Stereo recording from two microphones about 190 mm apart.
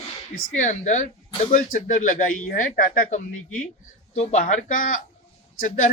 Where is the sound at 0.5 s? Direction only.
40° left (ahead or behind).